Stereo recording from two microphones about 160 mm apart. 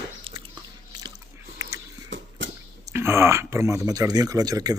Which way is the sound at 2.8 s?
15° right (ahead or behind).